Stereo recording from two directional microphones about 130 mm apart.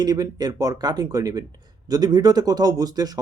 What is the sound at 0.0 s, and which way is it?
Speech, 30° right (ahead or behind).